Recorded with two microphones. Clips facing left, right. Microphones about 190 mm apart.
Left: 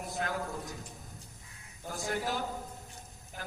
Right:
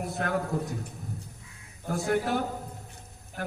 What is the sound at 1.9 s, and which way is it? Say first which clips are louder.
Speech: right 8 dB; 60° right (ahead or behind).